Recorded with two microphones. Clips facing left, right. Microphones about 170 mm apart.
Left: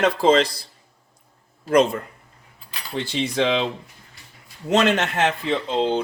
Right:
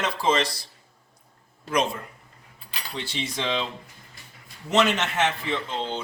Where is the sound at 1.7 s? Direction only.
55° left (ahead or behind).